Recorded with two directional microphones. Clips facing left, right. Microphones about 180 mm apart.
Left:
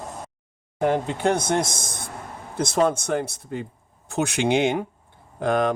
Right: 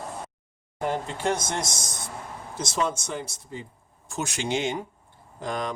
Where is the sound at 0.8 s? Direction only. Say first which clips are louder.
Left 6 dB; 55° left (ahead or behind).